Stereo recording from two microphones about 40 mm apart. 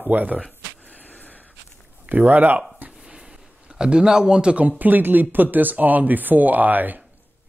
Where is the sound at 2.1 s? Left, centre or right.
Right.